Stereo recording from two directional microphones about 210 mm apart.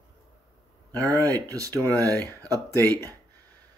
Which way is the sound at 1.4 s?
15° right (ahead or behind).